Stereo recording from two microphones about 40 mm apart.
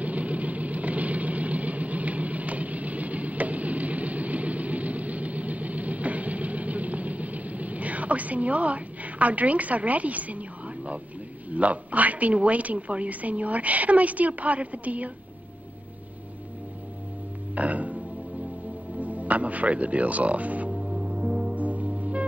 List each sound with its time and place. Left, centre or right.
0.0 s vehicle: right
11.5 s a woman's voice: right
17.6 s music: right
18.9 s speech: right
20.8 s music: right
21.5 s music: right